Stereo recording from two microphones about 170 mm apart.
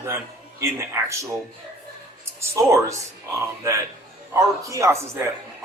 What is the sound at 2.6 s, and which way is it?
Speech, 20° right (ahead or behind).